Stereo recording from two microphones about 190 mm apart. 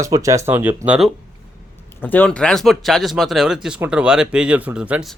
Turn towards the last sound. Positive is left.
turn(degrees=-5)  # may be behind; listen again after turning